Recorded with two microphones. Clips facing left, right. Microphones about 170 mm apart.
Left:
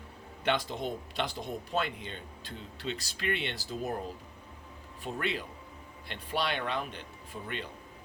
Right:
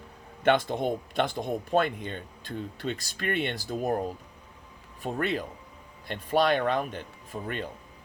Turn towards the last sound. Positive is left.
turn(degrees=-45)  # may be behind; listen again after turning